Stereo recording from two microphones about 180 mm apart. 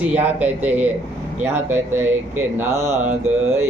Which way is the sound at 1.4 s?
15° right (ahead or behind).